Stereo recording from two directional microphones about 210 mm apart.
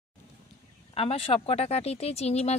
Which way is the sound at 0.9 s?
25° left (ahead or behind).